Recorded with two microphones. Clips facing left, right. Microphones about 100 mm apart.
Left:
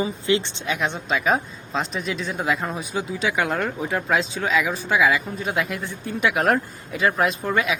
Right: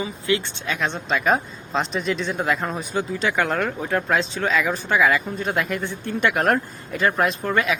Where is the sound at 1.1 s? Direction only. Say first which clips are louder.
Right 2 dB; centre (ahead or behind).